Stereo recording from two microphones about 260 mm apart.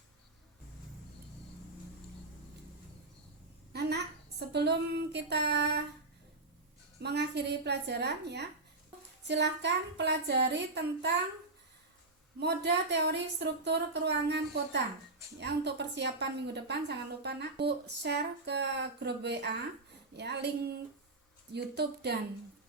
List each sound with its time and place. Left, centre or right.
3.7 s a woman's voice: right
7.0 s a woman's voice: right
12.4 s a woman's voice: right